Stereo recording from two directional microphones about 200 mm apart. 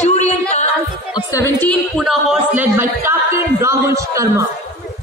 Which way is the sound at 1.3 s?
15° left (ahead or behind).